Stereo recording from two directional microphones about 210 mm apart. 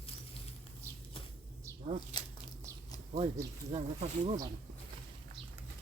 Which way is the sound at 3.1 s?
30° right (ahead or behind).